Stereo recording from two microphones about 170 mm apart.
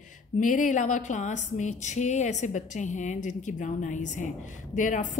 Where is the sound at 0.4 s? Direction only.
50° left (ahead or behind).